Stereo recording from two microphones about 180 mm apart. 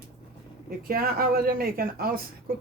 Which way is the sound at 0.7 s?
55° right (ahead or behind).